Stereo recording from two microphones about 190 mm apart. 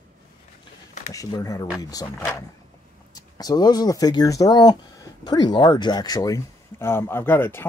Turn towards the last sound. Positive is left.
turn(degrees=10)  # may be behind; listen again after turning